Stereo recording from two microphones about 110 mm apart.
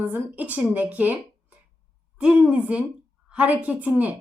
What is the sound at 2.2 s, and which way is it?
A woman's voice, 10° right (ahead or behind).